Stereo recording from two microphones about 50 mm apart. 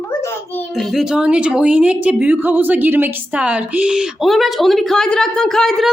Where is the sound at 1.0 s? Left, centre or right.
Centre; by 3.2 s right.